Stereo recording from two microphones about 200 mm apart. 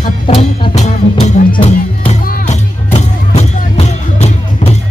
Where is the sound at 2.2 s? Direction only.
45° left (ahead or behind).